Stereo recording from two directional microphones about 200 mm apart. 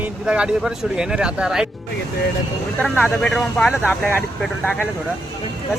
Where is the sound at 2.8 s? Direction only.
5° left (ahead or behind).